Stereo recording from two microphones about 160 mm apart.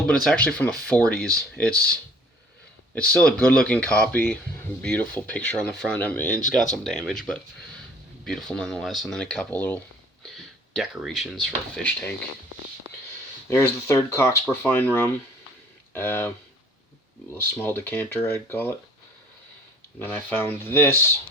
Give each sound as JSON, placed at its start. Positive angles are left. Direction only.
{"t": 0.0, "sound": "speech", "side_deg": 5}
{"t": 2.9, "sound": "speech", "side_deg": 10}
{"t": 10.3, "sound": "speech", "side_deg": 0}
{"t": 11.8, "sound": "speech", "side_deg": 10}
{"t": 13.5, "sound": "speech", "side_deg": 15}
{"t": 17.3, "sound": "speech", "side_deg": 15}
{"t": 20.0, "sound": "speech", "side_deg": 10}